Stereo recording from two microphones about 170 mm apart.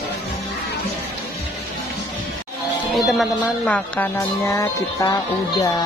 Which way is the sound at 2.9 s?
Centre (ahead or behind).